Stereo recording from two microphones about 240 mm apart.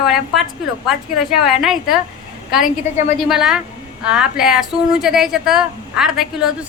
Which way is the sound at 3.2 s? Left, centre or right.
Centre.